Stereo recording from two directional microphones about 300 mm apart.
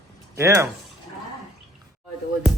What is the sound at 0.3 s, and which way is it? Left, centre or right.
Speech, centre.